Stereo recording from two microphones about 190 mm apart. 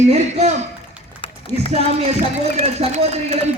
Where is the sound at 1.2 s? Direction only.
25° left (ahead or behind).